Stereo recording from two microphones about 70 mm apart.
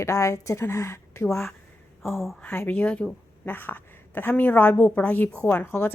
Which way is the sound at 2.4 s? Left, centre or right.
Left.